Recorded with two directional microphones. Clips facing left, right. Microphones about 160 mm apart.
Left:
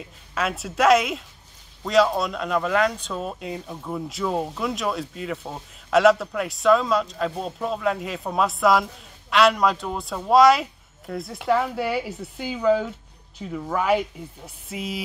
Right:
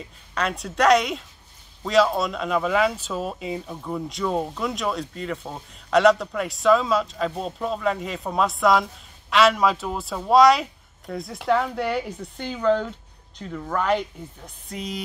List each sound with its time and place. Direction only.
0.0 s speech: 5° left (ahead or behind)